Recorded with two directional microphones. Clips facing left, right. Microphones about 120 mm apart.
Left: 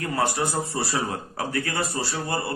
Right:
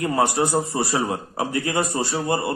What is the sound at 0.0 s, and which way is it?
Speech, 20° right (ahead or behind).